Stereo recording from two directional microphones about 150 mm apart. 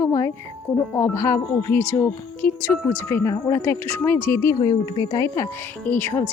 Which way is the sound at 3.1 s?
15° left (ahead or behind).